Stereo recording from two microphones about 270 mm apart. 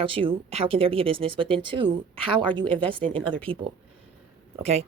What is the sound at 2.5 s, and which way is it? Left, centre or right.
Speech, centre.